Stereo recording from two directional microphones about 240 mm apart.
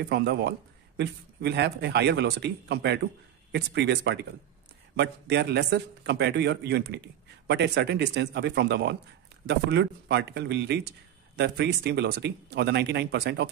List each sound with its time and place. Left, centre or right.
0.1 s a man's voice: right